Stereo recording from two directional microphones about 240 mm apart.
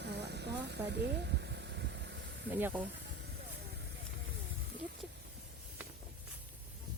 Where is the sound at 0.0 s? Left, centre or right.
Right.